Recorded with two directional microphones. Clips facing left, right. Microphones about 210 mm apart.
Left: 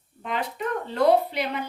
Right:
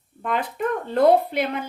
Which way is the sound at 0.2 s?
55° right (ahead or behind).